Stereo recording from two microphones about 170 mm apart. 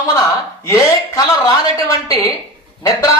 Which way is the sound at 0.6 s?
20° left (ahead or behind).